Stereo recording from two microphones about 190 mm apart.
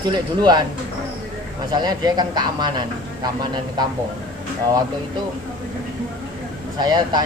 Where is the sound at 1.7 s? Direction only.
20° right (ahead or behind).